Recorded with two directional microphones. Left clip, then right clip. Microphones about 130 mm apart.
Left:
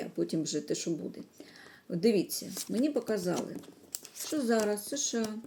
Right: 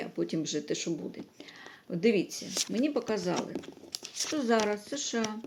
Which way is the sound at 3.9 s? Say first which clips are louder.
Right 8 dB; 25° right (ahead or behind).